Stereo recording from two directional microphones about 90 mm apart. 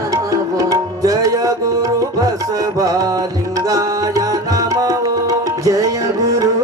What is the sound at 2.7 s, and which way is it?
Music, 40° right (ahead or behind).